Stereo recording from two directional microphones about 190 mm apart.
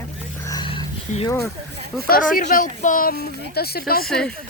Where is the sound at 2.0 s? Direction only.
50° left (ahead or behind).